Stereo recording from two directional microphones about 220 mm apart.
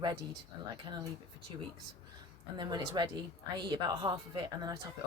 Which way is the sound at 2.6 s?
20° right (ahead or behind).